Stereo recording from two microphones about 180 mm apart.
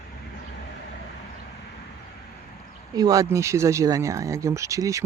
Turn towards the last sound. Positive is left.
turn(degrees=-15)  # may be behind; listen again after turning